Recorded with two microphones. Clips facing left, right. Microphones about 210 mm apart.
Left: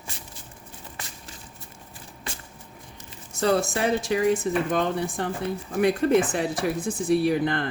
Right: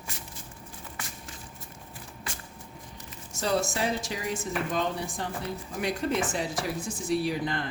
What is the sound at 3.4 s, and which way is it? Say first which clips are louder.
Speech: left 5 dB; 55° left (ahead or behind).